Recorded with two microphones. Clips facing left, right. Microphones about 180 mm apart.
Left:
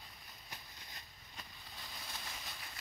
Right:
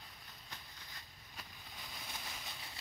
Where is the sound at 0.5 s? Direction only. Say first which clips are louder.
Left 1 dB; 15° left (ahead or behind).